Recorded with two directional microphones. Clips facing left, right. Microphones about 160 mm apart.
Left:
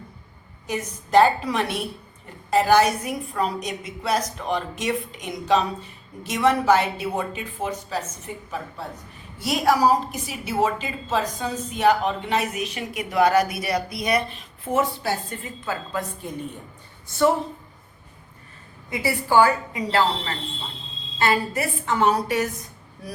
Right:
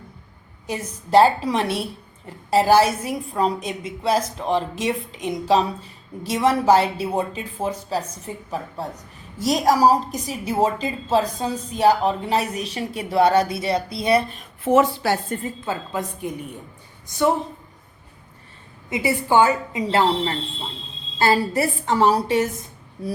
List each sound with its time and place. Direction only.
0.7 s a woman's voice: 30° right (ahead or behind)
14.6 s a woman's voice: 85° right
15.4 s a woman's voice: 25° right (ahead or behind)
18.9 s a woman's voice: 20° right (ahead or behind)